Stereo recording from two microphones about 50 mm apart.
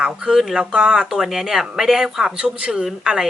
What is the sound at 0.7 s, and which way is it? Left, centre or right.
Speech, centre.